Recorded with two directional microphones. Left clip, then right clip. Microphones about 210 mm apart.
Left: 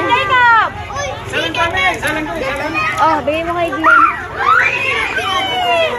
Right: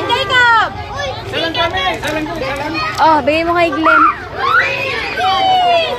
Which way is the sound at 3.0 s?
15° right (ahead or behind).